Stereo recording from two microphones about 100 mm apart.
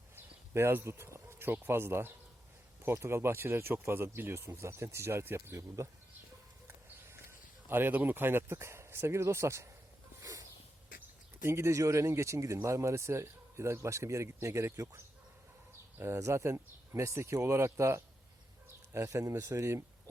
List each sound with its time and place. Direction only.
0.5 s speech: 25° right (ahead or behind)
6.7 s a sound: 25° right (ahead or behind)
11.4 s speech: 30° right (ahead or behind)